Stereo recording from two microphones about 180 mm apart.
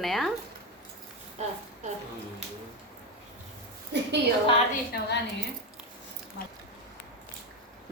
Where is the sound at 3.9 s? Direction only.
70° right (ahead or behind).